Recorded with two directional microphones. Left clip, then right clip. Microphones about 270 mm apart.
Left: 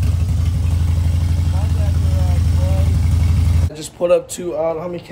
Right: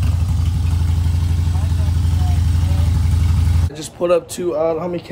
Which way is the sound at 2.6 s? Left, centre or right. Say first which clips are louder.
Left 3 dB; centre.